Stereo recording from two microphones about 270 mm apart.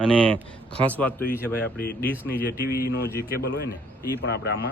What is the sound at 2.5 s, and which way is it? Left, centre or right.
Speech, left.